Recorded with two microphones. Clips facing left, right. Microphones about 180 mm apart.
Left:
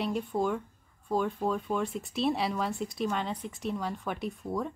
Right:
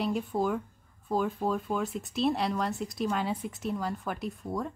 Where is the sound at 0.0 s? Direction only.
Centre (ahead or behind).